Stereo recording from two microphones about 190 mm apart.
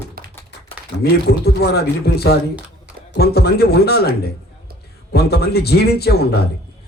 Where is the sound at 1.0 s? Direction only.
55° left (ahead or behind).